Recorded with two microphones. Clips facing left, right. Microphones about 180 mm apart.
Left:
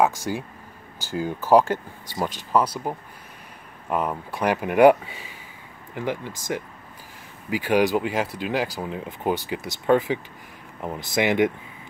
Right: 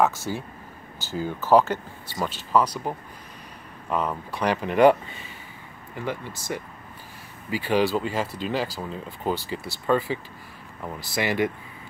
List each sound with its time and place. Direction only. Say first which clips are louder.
0.0 s speech: left 1 dB; 10° left (ahead or behind)